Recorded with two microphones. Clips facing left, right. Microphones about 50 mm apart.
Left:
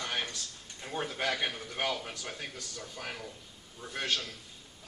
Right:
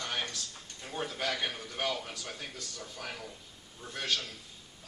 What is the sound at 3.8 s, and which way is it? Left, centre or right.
Speech, left.